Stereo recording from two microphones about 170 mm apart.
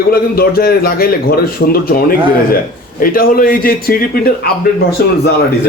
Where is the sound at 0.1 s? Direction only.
65° left (ahead or behind).